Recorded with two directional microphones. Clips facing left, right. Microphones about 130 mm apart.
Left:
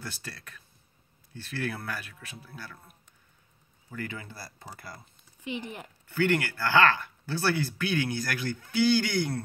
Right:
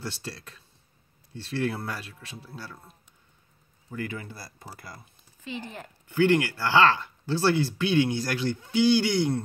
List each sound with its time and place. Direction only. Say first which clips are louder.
0.0 s speech: right 5 dB; 25° right (ahead or behind)
5.4 s speech: left 1 dB; 15° left (ahead or behind)
6.0 s speech: right 5 dB; 20° right (ahead or behind)